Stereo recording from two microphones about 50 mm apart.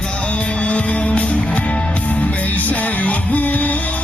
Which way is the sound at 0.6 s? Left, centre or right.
Left.